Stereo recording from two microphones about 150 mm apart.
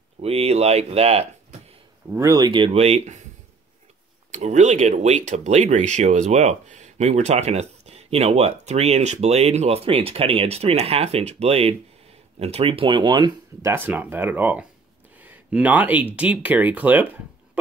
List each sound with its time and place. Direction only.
0.2 s speech: 40° right (ahead or behind)
2.1 s speech: 20° right (ahead or behind); by 3.3 s 45° right (ahead or behind)
4.3 s speech: 50° right (ahead or behind); by 13.3 s 30° right (ahead or behind)
13.6 s speech: 15° right (ahead or behind)
15.1 s a sound: 10° right (ahead or behind)
16.2 s speech: 10° right (ahead or behind)